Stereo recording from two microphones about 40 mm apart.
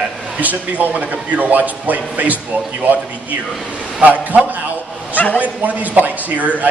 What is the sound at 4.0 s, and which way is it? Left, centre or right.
Speech, right.